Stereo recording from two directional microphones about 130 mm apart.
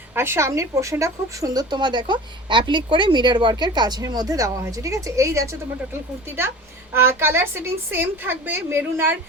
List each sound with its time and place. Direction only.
0.1 s speech: 20° right (ahead or behind)
6.9 s a woman's voice: 20° right (ahead or behind)